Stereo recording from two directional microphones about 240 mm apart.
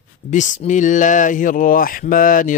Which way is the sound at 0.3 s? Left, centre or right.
Left.